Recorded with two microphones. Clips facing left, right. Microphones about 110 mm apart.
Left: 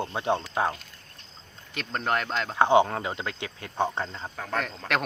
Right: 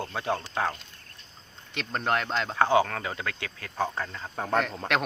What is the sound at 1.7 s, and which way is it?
Speech, centre (ahead or behind).